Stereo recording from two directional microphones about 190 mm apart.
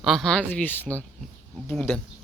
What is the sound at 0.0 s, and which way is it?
Speech, centre (ahead or behind).